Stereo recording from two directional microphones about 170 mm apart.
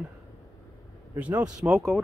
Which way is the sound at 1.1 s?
10° right (ahead or behind).